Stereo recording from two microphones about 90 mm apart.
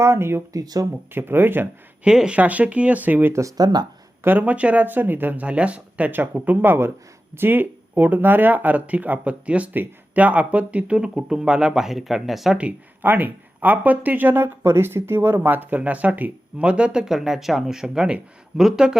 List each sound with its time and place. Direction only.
0.0 s speech: 30° right (ahead or behind)
0.5 s speech: 45° right (ahead or behind)
1.1 s speech: 25° right (ahead or behind)
2.0 s speech: 10° right (ahead or behind)
3.6 s speech: 50° right (ahead or behind)
4.2 s speech: 20° right (ahead or behind); by 12.5 s centre (ahead or behind)
12.5 s speech: 20° right (ahead or behind)